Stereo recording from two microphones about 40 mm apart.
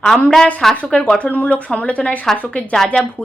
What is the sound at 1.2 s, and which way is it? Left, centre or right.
Speech, left.